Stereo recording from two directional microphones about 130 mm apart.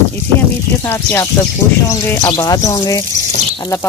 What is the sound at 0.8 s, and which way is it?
Speech, 15° left (ahead or behind).